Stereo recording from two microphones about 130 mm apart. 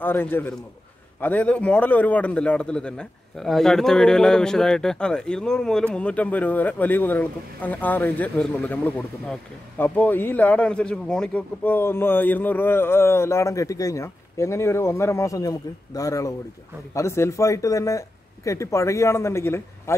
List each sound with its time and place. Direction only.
0.0 s a man's voice: 15° left (ahead or behind)